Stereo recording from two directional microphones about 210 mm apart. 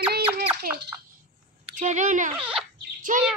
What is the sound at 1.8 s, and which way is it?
Speech, 35° right (ahead or behind).